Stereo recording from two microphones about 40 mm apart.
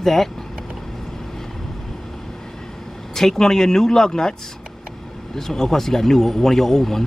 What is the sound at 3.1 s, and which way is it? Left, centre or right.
Speech, centre.